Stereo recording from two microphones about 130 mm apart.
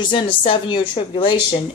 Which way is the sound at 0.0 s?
40° left (ahead or behind).